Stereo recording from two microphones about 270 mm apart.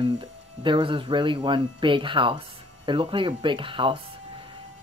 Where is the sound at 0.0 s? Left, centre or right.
Centre.